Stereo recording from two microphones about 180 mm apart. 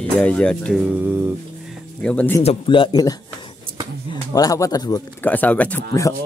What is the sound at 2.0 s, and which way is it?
Speech, 5° left (ahead or behind).